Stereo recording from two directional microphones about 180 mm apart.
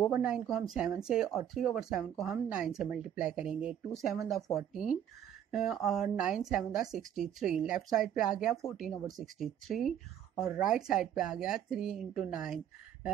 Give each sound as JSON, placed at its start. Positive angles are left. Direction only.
{"t": 0.1, "sound": "speech", "side_deg": -5}
{"t": 5.5, "sound": "speech", "side_deg": 0}